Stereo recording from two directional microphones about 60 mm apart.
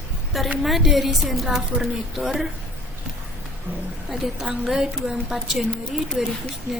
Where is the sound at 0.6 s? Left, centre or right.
Centre.